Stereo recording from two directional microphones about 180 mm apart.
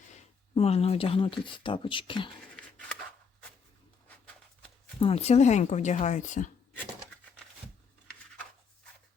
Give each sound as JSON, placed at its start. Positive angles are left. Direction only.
{"t": 0.1, "sound": "speech", "side_deg": 35}
{"t": 4.9, "sound": "speech", "side_deg": 30}